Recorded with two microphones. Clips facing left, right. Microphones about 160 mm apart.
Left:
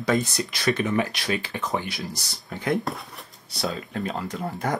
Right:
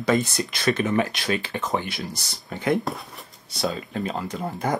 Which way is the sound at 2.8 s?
Centre (ahead or behind).